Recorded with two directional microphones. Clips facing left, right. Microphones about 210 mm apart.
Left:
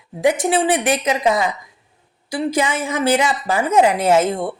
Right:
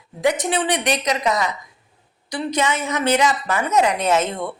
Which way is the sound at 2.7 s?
30° left (ahead or behind).